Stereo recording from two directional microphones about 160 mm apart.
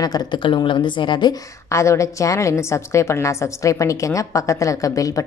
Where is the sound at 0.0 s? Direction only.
25° left (ahead or behind).